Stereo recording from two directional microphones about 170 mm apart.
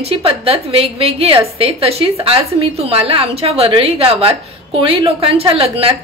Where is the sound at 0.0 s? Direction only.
35° right (ahead or behind).